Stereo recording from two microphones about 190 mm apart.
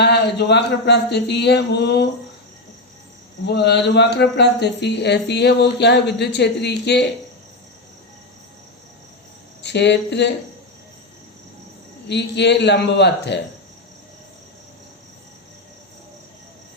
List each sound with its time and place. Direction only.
0.0 s speech: 65° left (ahead or behind)
3.4 s speech: 60° left (ahead or behind)
9.6 s speech: 65° left (ahead or behind)
12.0 s speech: 65° left (ahead or behind)